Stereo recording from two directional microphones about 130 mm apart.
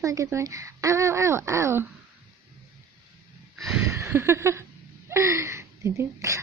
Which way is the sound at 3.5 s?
Centre (ahead or behind).